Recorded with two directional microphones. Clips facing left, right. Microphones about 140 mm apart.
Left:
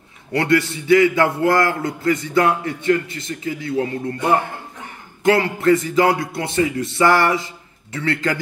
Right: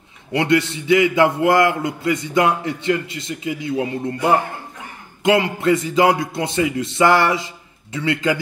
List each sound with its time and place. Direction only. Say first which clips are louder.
0.3 s a man's voice: even; 20° right (ahead or behind)
5.2 s a man's voice: left 1 dB; 20° right (ahead or behind)